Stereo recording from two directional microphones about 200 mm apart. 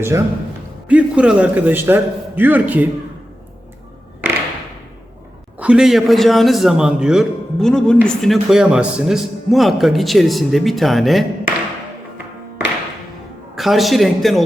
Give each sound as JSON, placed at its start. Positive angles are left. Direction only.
{"t": 0.1, "sound": "a man's voice", "side_deg": -15}
{"t": 5.5, "sound": "speech", "side_deg": -5}
{"t": 13.6, "sound": "speech", "side_deg": 0}